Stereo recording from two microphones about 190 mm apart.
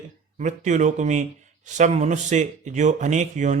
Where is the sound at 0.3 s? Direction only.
40° right (ahead or behind).